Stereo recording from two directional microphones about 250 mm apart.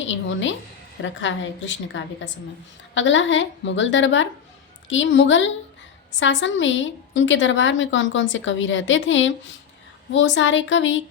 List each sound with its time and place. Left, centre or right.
0.0 s a woman's voice: left